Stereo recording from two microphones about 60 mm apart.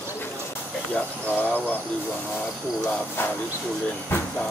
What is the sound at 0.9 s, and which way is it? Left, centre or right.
Speech, left.